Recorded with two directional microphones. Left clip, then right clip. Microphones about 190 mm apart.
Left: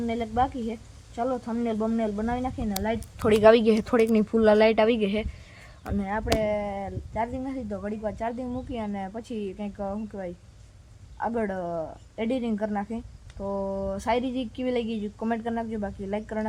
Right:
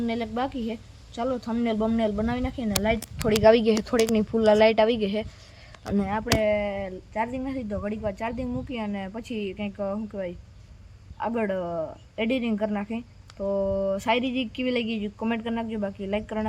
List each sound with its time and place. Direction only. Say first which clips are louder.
0.0 s speech: left 2 dB; 5° right (ahead or behind)
2.6 s speech: right 6 dB; 20° right (ahead or behind)
3.2 s speech: left 1 dB; 15° left (ahead or behind); by 16.5 s 5° right (ahead or behind)